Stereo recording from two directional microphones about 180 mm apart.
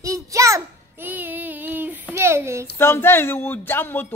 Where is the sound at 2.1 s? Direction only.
15° right (ahead or behind).